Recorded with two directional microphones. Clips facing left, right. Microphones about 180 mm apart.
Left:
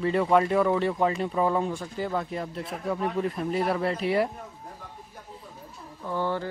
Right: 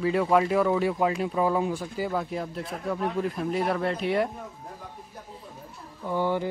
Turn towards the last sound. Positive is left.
turn(degrees=-15)  # may be behind; listen again after turning